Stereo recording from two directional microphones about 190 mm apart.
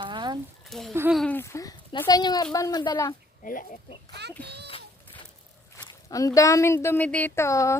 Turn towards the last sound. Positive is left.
turn(degrees=15)  # may be behind; listen again after turning